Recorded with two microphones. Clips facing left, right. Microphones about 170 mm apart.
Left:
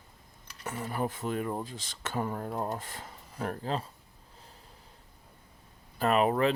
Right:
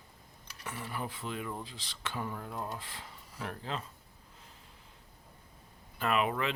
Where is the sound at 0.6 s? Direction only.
45° left (ahead or behind).